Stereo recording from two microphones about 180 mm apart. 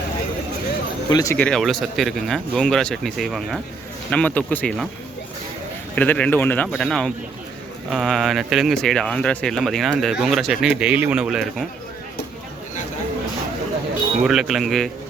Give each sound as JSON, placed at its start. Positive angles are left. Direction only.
{"t": 1.1, "sound": "speech", "side_deg": 20}
{"t": 1.4, "sound": "speech", "side_deg": 5}
{"t": 6.0, "sound": "speech", "side_deg": 5}
{"t": 14.3, "sound": "speech", "side_deg": 0}